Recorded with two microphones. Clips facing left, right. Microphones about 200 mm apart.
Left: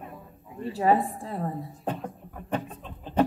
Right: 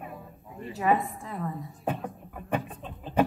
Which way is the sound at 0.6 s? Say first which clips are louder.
Left 3 dB; 30° left (ahead or behind).